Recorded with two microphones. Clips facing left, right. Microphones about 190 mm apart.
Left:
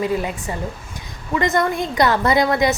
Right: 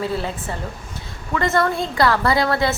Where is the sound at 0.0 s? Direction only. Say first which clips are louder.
Left 3 dB; 15° left (ahead or behind).